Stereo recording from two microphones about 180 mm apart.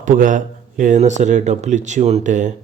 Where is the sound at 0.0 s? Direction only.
45° right (ahead or behind).